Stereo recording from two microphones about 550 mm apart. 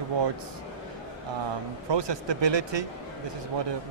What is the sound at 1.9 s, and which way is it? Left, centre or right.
Speech, right.